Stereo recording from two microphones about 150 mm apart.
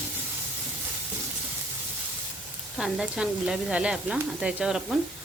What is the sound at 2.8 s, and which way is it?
Sizzle, 5° right (ahead or behind).